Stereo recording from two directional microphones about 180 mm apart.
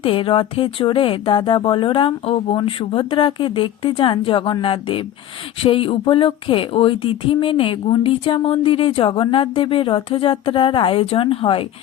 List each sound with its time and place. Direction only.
0.0 s speech: 30° left (ahead or behind)